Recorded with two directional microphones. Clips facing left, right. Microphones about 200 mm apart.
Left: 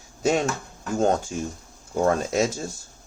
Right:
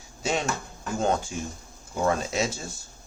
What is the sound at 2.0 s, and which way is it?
Speech, 45° left (ahead or behind).